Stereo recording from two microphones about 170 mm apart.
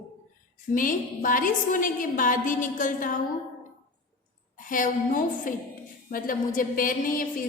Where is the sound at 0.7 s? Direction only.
50° left (ahead or behind).